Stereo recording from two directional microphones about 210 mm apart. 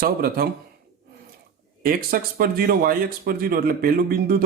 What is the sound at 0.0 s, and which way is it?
Speech, 45° right (ahead or behind).